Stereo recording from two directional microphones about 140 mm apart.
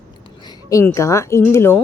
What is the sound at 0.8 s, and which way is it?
Speech, 20° left (ahead or behind).